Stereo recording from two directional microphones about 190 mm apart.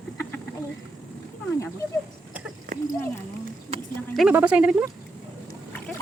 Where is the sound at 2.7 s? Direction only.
45° right (ahead or behind).